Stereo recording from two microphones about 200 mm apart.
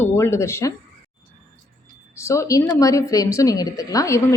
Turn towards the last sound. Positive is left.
turn(degrees=15)  # may be behind; listen again after turning